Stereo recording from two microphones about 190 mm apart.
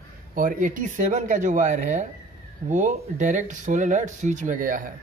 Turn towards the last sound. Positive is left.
turn(degrees=-45)  # may be behind; listen again after turning